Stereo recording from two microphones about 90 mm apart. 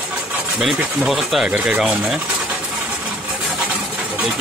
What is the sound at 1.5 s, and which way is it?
Speech, 15° right (ahead or behind).